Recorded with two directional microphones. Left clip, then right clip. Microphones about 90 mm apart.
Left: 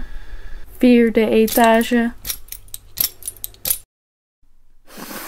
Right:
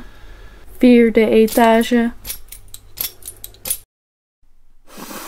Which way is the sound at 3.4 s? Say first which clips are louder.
Left 2 dB; 40° left (ahead or behind).